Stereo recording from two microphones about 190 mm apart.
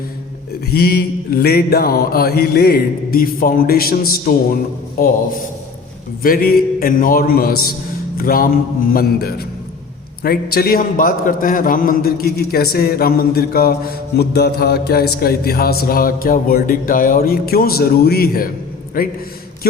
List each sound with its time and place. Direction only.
0.6 s speech: 55° left (ahead or behind)
6.2 s speech: 50° left (ahead or behind)